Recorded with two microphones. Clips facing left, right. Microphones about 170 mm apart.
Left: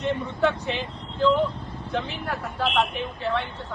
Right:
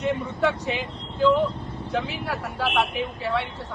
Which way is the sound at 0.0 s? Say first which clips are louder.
Even; 5° right (ahead or behind).